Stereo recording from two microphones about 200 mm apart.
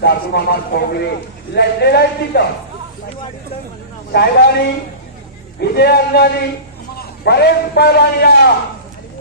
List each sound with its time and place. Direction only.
0.0 s a man's voice: 50° left (ahead or behind)
4.1 s a man's voice: 55° left (ahead or behind)